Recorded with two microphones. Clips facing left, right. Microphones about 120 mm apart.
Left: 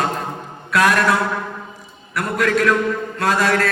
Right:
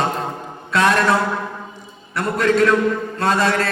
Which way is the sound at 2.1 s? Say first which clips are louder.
Right 2 dB; 30° right (ahead or behind).